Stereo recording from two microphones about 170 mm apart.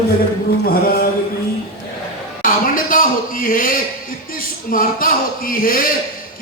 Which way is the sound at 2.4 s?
55° left (ahead or behind).